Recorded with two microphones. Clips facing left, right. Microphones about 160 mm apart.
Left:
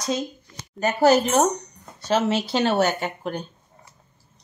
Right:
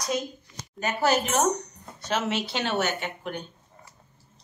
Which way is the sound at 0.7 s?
40° left (ahead or behind).